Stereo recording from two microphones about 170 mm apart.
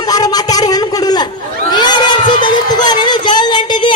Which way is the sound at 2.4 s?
25° left (ahead or behind).